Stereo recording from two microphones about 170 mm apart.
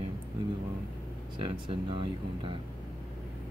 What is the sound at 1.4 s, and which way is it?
Speech, 30° right (ahead or behind).